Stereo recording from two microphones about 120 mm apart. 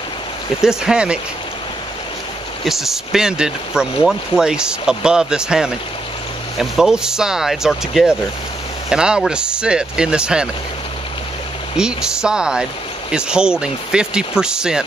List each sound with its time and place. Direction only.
0.7 s speech: 5° right (ahead or behind)
2.6 s speech: centre (ahead or behind)
11.7 s speech: 5° right (ahead or behind)